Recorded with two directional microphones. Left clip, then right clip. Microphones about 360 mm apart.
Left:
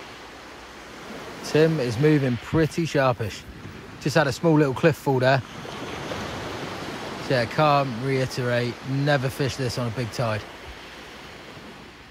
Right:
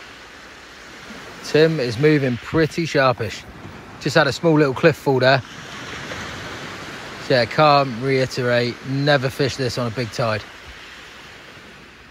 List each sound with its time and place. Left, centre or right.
1.4 s speech: centre
5.9 s a sound: centre
7.2 s speech: centre